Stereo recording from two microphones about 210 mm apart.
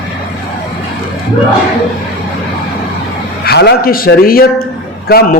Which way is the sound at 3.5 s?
50° left (ahead or behind).